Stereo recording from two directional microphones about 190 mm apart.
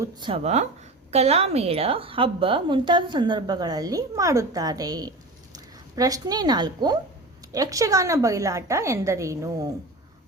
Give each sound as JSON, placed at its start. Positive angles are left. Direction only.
{"t": 0.0, "sound": "a woman's voice", "side_deg": -25}
{"t": 0.4, "sound": "a woman's voice", "side_deg": -35}